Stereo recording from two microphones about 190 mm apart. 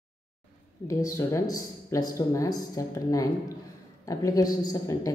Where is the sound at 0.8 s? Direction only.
15° left (ahead or behind).